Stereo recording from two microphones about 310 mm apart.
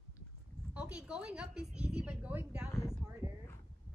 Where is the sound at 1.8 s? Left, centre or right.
Centre.